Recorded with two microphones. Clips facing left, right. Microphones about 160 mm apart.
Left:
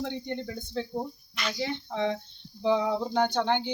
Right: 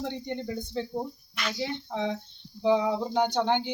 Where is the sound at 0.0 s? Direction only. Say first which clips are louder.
Even; 5° right (ahead or behind).